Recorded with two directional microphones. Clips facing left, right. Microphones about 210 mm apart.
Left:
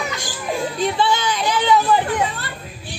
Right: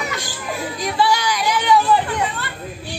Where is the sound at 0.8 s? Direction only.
25° left (ahead or behind).